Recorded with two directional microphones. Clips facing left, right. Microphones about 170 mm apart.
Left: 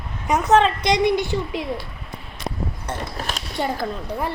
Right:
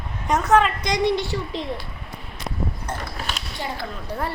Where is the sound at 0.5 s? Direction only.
25° left (ahead or behind).